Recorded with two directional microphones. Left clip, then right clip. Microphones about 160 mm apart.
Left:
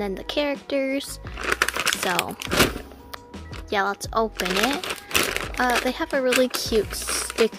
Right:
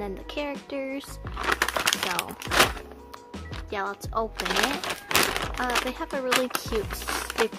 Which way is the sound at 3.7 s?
40° left (ahead or behind).